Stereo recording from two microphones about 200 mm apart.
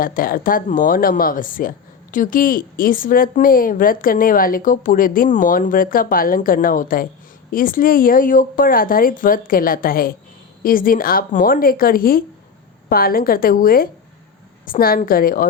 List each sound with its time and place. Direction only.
0.0 s a woman's voice: 45° left (ahead or behind)